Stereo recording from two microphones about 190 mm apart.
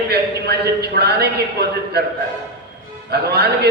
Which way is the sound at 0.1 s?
55° right (ahead or behind).